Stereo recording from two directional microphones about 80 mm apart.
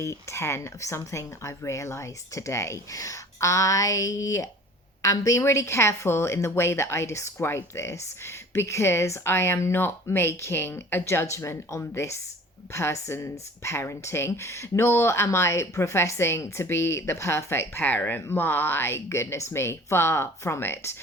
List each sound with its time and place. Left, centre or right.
0.0 s speech: left